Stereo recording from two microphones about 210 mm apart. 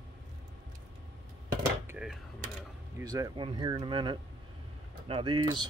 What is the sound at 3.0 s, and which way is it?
Speech, 15° right (ahead or behind).